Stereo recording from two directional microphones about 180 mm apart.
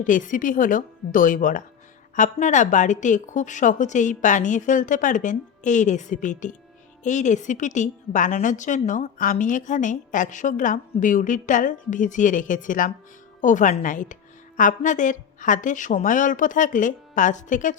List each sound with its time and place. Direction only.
0.0 s a woman's voice: 45° left (ahead or behind)